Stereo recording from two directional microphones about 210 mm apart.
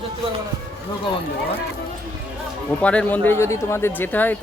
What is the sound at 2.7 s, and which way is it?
Speech, 5° left (ahead or behind).